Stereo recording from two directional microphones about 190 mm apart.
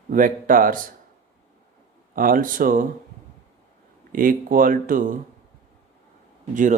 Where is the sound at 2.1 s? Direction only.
45° right (ahead or behind).